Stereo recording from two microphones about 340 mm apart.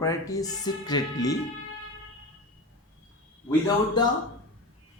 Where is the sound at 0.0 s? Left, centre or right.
Centre.